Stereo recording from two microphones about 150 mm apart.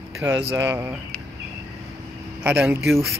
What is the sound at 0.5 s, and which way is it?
Speech, 20° right (ahead or behind).